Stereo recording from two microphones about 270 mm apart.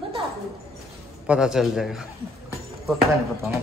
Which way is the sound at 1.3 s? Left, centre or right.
Centre.